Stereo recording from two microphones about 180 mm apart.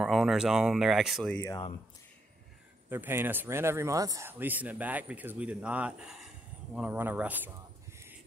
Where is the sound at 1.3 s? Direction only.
15° left (ahead or behind).